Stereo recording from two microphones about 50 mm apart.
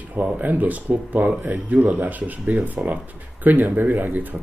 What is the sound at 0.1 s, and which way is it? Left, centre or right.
Speech, right.